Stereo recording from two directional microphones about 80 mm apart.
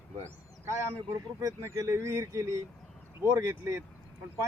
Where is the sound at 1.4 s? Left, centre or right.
Right.